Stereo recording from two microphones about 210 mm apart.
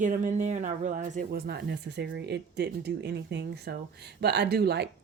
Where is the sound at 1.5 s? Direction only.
50° right (ahead or behind).